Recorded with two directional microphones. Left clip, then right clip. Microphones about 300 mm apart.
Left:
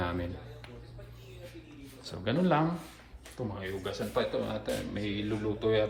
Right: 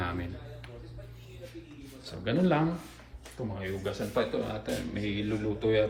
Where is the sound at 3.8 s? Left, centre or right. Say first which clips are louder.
Right 1 dB; centre.